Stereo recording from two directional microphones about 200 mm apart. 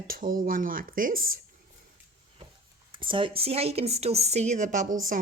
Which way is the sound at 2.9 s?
25° right (ahead or behind).